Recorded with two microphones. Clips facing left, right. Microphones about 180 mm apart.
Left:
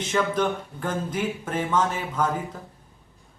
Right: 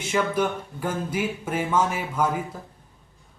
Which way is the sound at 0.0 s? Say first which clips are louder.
Even; 10° right (ahead or behind).